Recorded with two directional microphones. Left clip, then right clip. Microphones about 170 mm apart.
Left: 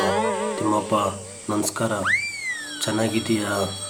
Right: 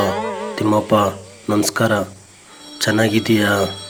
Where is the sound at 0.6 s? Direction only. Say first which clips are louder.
Right 9 dB; 35° right (ahead or behind).